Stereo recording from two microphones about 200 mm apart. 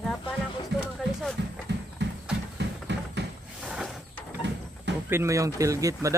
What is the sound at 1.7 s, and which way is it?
Clip-clop, 60° right (ahead or behind).